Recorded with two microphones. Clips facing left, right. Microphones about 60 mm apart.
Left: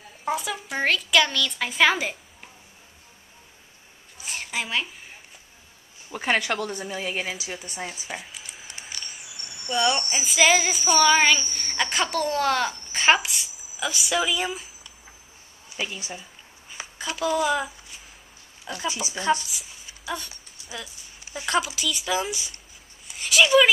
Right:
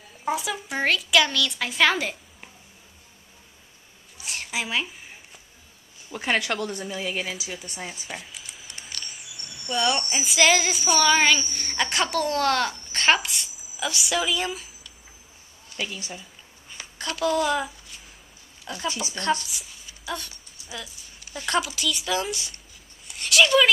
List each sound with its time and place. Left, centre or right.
0.2 s speech: centre
4.2 s a sound: centre
6.1 s a woman's voice: centre
15.7 s a woman's voice: centre